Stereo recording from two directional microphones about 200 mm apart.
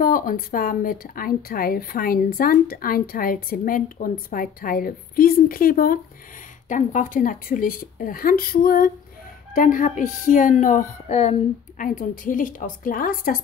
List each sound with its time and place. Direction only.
0.0 s a woman's voice: 45° left (ahead or behind)